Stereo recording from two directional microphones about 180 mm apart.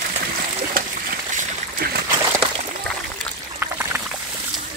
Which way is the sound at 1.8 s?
60° right (ahead or behind).